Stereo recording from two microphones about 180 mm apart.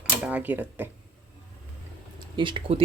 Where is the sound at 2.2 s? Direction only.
25° right (ahead or behind).